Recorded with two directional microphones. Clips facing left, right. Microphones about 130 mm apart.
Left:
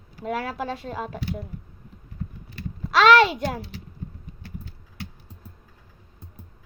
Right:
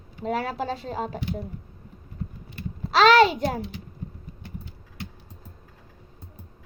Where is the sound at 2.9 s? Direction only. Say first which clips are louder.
Even; 35° right (ahead or behind).